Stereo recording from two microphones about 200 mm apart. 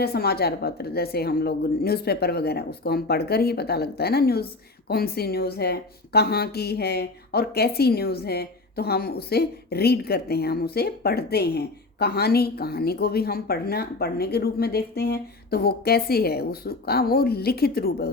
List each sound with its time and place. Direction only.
0.0 s a woman's voice: 50° left (ahead or behind)